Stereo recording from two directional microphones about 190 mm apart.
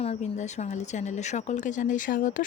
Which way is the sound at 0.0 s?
35° left (ahead or behind).